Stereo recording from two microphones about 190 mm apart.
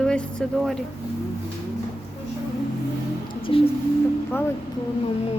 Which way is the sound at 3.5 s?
25° left (ahead or behind).